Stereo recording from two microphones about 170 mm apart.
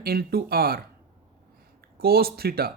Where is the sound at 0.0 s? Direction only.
65° right (ahead or behind).